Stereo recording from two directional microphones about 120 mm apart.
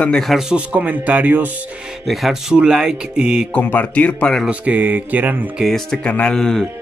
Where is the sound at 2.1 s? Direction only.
Centre (ahead or behind).